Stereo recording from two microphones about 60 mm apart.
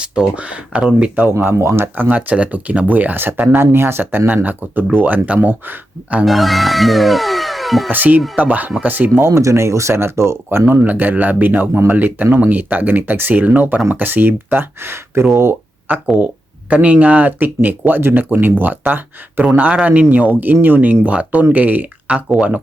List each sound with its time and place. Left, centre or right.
0.0 s speech: centre
1.5 s speech: right
2.0 s speech: right
6.2 s speech: centre
7.9 s speech: right
9.2 s speech: right
10.8 s speech: right
15.9 s speech: right